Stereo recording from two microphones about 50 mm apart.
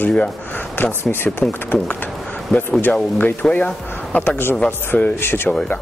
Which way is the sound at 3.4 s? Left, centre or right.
Centre.